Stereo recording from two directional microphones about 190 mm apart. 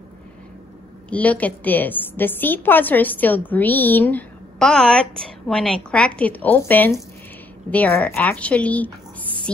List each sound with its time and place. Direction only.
1.1 s a woman's voice: 10° left (ahead or behind)